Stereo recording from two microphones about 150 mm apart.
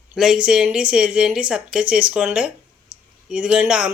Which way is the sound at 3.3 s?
10° right (ahead or behind).